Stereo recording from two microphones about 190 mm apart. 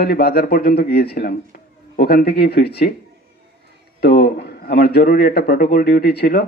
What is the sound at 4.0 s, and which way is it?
A man's voice, 55° left (ahead or behind).